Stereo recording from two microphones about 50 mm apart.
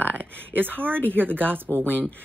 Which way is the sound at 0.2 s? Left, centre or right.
Left.